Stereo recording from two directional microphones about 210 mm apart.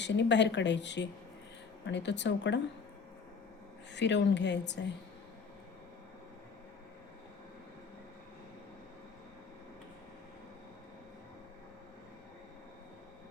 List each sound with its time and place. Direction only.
0.0 s speech: 55° left (ahead or behind)
3.9 s speech: 55° left (ahead or behind)